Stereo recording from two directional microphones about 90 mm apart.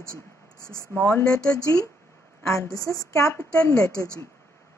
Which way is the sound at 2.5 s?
40° left (ahead or behind).